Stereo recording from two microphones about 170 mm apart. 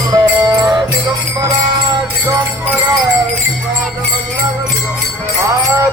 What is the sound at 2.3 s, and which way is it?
Music, 15° right (ahead or behind).